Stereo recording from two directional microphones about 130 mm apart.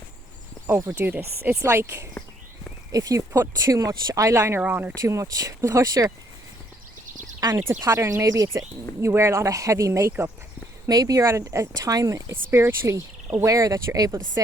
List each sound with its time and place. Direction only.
0.7 s speech: 20° right (ahead or behind)
7.7 s speech: 20° right (ahead or behind)